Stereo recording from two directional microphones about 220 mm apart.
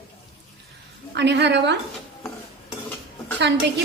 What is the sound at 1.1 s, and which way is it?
Speech, 50° right (ahead or behind).